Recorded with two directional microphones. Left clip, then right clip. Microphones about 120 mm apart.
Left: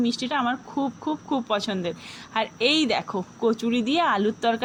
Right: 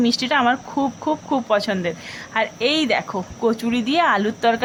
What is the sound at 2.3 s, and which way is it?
A woman's voice, 25° left (ahead or behind).